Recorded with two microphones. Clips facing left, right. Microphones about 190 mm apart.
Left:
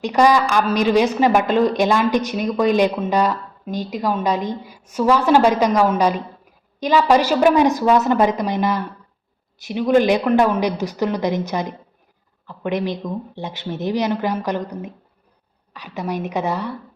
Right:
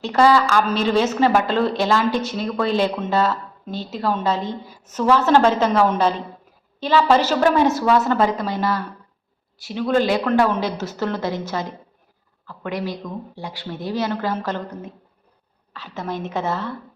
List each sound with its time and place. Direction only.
0.0 s a woman's voice: 15° left (ahead or behind)